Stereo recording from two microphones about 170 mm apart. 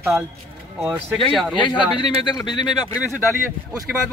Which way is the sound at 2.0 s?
25° left (ahead or behind).